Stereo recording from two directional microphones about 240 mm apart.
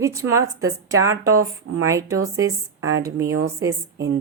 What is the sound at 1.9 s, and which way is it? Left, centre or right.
Speech, centre.